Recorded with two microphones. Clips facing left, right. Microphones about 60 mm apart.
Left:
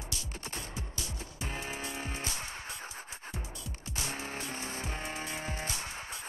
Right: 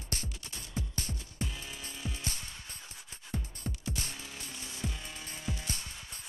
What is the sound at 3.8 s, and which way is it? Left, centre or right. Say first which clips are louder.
Music: left 2 dB; right.